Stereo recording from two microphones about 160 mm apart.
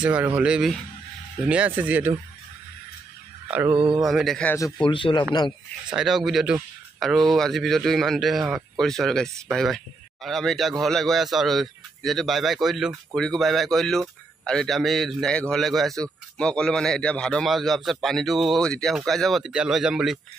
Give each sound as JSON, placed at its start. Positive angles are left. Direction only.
{"t": 0.0, "sound": "speech", "side_deg": -10}
{"t": 3.4, "sound": "mantra", "side_deg": -10}
{"t": 3.7, "sound": "mantra", "side_deg": -30}
{"t": 4.1, "sound": "speech", "side_deg": 0}
{"t": 4.8, "sound": "a man's voice", "side_deg": 30}
{"t": 5.9, "sound": "speech", "side_deg": 0}